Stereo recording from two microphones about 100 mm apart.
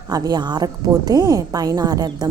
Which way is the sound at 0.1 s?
40° right (ahead or behind).